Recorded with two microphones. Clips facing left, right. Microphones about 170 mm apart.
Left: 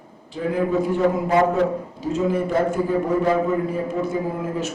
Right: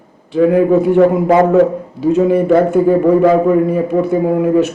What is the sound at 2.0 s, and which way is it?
A man's voice, 65° right (ahead or behind).